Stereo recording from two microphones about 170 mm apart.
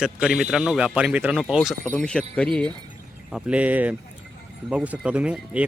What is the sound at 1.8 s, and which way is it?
Speech, 10° left (ahead or behind).